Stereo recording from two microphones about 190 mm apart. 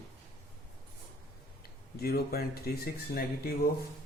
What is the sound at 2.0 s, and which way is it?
Speech, 55° left (ahead or behind).